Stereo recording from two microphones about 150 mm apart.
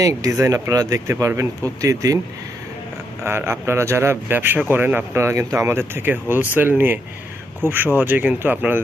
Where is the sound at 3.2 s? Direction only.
15° right (ahead or behind).